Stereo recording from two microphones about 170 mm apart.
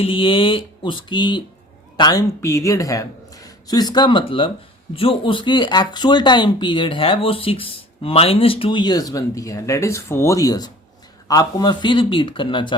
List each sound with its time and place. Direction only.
0.0 s speech: 30° left (ahead or behind)